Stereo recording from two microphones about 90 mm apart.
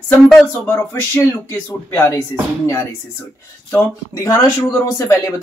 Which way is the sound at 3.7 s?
30° left (ahead or behind).